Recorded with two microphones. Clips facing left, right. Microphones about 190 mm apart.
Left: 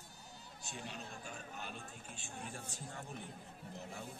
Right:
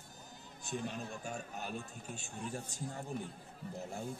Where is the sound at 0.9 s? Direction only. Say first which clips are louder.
Right 6 dB; 45° right (ahead or behind).